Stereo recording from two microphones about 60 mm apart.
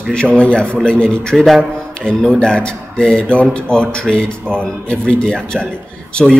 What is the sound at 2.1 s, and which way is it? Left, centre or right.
A man's voice, centre.